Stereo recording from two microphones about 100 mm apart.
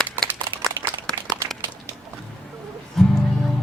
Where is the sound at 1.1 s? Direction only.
5° left (ahead or behind).